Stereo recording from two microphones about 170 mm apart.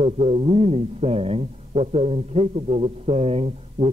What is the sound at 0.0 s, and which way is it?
A man's voice, 35° right (ahead or behind).